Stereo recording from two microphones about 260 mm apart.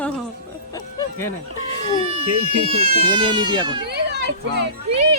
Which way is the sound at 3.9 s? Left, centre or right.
Right.